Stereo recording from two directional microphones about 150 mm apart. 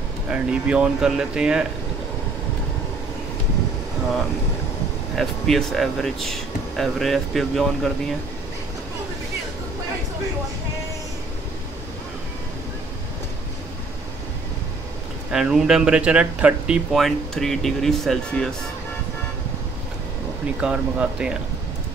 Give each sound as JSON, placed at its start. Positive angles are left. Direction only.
{"t": 0.3, "sound": "speech", "side_deg": -5}
{"t": 5.1, "sound": "speech", "side_deg": 0}
{"t": 15.3, "sound": "speech", "side_deg": -5}
{"t": 20.6, "sound": "speech", "side_deg": -5}